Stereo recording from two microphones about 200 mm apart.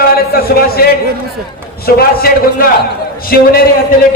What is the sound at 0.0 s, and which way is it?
A man's voice, 50° left (ahead or behind).